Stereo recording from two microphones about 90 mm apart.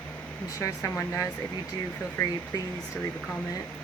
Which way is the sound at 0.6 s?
35° left (ahead or behind).